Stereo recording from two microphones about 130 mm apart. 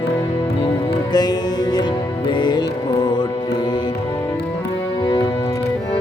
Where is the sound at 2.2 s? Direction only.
35° left (ahead or behind).